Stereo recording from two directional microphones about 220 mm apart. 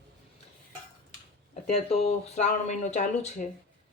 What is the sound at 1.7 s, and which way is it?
Speech, 30° left (ahead or behind).